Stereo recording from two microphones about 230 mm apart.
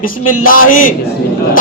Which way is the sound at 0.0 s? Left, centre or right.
Left.